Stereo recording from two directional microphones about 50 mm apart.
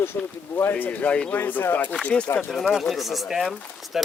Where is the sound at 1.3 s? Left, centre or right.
Left.